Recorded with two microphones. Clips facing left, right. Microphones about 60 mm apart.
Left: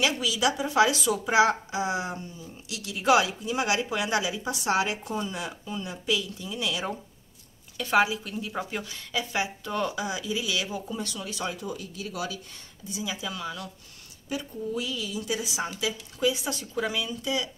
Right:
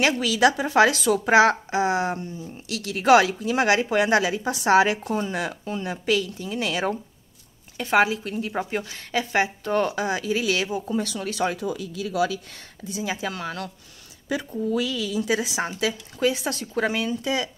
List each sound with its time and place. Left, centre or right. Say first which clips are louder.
0.0 s a woman's voice: right 6 dB; right
7.7 s speech: right 3 dB; right
11.1 s speech: right 7 dB; right
12.9 s speech: right 5 dB; right
14.3 s a woman's voice: right 6 dB; right